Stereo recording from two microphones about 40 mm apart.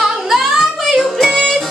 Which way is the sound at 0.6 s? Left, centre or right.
Centre.